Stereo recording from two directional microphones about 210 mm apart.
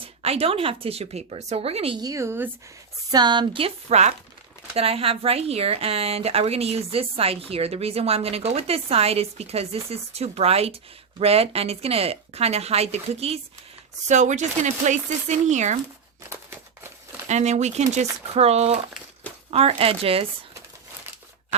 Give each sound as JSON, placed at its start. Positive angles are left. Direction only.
{"t": 0.0, "sound": "speech", "side_deg": -30}
{"t": 17.2, "sound": "speech", "side_deg": -35}